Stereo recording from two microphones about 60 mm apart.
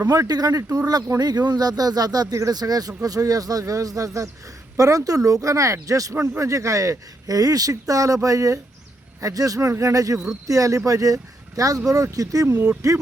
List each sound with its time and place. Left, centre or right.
0.1 s speech: right